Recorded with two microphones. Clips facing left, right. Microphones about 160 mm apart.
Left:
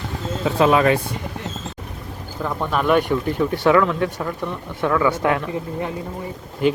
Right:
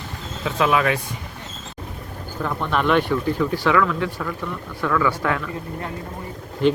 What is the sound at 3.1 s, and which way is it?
Speech, 20° left (ahead or behind).